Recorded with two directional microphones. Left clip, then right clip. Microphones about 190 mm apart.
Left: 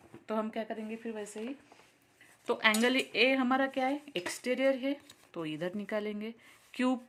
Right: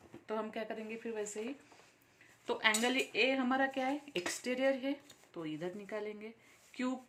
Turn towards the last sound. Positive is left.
turn(degrees=45)  # may be behind; listen again after turning